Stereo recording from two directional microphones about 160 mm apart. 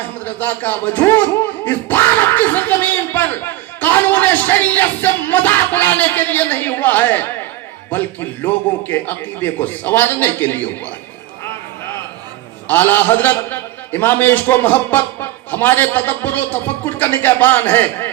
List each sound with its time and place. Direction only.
0.3 s a man's voice: 10° left (ahead or behind)
12.6 s a man's voice: 10° left (ahead or behind)